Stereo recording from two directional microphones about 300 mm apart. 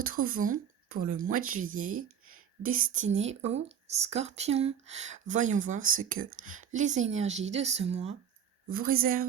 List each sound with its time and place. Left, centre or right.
0.0 s a woman's voice: right